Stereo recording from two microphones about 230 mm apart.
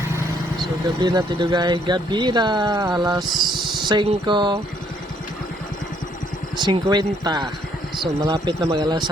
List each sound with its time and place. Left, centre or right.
0.9 s speech: centre
6.6 s speech: centre